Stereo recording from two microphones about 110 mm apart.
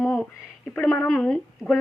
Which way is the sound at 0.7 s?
15° left (ahead or behind).